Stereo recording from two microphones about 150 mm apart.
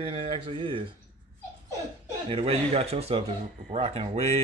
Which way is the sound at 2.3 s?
40° right (ahead or behind).